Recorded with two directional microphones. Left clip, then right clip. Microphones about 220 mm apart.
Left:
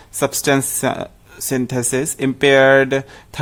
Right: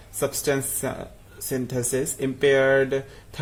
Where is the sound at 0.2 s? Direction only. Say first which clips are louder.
Left 8 dB; 35° left (ahead or behind).